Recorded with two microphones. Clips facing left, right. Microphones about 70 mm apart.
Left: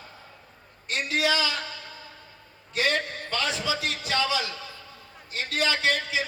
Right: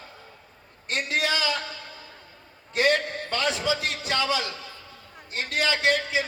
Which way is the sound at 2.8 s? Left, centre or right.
Right.